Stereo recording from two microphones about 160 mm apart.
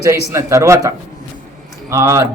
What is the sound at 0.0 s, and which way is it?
A man's voice, 20° right (ahead or behind).